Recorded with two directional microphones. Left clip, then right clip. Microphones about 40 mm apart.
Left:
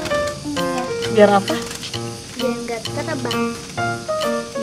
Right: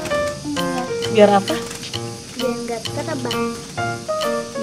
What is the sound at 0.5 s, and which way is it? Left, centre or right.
Music, centre.